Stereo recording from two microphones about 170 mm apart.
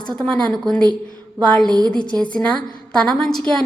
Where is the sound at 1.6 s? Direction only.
25° right (ahead or behind).